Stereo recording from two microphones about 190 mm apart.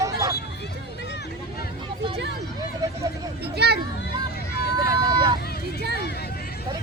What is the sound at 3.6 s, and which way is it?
Speech, 60° right (ahead or behind).